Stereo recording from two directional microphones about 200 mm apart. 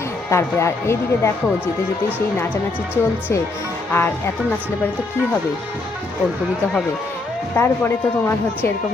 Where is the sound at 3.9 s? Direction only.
10° left (ahead or behind).